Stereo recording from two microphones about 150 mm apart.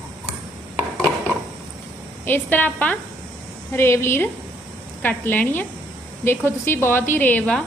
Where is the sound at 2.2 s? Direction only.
10° left (ahead or behind).